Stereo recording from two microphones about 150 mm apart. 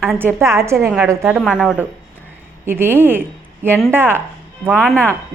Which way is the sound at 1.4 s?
Centre (ahead or behind).